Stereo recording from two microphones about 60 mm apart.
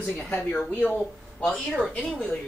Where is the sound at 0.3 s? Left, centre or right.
Left.